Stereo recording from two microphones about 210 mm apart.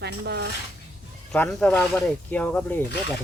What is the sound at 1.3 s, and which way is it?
Speech, 5° left (ahead or behind).